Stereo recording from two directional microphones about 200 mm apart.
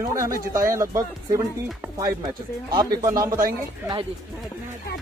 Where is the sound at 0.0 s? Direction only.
15° right (ahead or behind).